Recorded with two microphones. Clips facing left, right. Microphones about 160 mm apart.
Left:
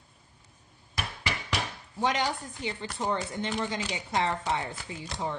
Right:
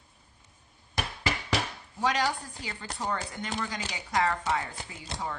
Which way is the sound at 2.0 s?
25° left (ahead or behind).